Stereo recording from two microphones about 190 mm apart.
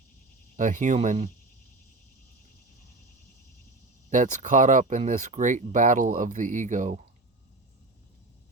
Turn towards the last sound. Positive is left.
turn(degrees=-40)  # may be behind; listen again after turning